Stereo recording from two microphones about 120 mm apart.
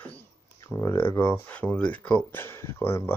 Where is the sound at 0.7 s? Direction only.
20° left (ahead or behind).